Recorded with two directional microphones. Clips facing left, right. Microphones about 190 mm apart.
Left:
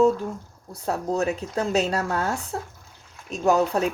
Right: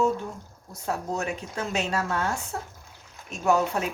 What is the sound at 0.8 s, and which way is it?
Speech, 35° left (ahead or behind).